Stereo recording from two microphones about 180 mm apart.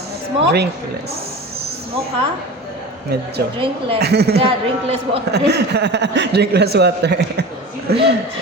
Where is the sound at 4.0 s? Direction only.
65° right (ahead or behind).